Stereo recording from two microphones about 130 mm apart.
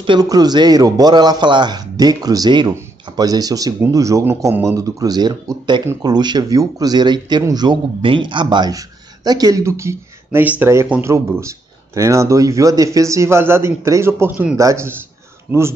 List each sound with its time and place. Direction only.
0.0 s speech: 35° right (ahead or behind)